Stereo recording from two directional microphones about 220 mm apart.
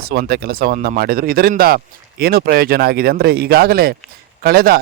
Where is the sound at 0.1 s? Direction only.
45° right (ahead or behind).